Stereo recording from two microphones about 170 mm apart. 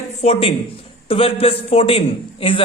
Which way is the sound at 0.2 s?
35° left (ahead or behind).